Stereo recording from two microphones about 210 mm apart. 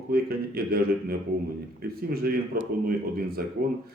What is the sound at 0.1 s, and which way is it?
Speech, 45° right (ahead or behind).